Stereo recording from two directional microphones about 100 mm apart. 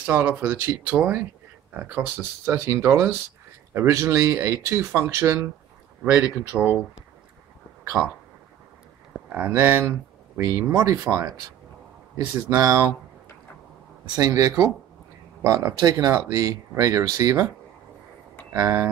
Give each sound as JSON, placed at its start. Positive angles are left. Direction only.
{"t": 0.0, "sound": "speech", "side_deg": -15}
{"t": 6.0, "sound": "speech", "side_deg": -15}
{"t": 8.0, "sound": "speech", "side_deg": -15}
{"t": 9.3, "sound": "speech", "side_deg": -20}
{"t": 11.1, "sound": "speech", "side_deg": -30}
{"t": 12.4, "sound": "speech", "side_deg": -25}
{"t": 14.1, "sound": "speech", "side_deg": -40}
{"t": 18.6, "sound": "speech", "side_deg": -30}